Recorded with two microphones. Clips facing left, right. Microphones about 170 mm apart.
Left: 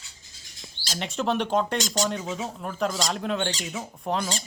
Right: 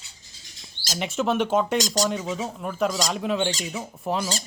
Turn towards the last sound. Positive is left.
turn(degrees=0)  # may be behind; listen again after turning